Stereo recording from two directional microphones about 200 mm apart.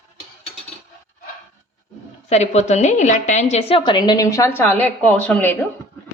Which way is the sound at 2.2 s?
35° left (ahead or behind).